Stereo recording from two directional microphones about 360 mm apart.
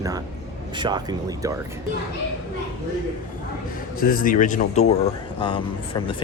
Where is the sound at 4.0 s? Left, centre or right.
Left.